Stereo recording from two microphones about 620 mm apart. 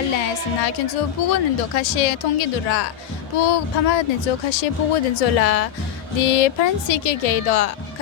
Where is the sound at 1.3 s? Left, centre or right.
Left.